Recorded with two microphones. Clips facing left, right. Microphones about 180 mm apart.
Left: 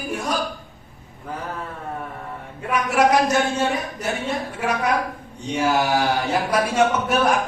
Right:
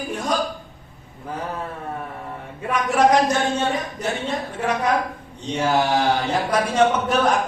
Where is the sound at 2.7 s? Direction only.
10° left (ahead or behind).